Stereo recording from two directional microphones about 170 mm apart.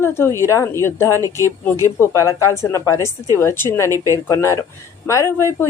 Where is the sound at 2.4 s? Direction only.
15° left (ahead or behind).